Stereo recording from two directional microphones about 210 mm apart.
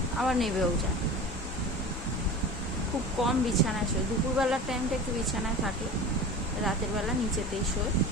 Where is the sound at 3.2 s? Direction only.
Centre (ahead or behind).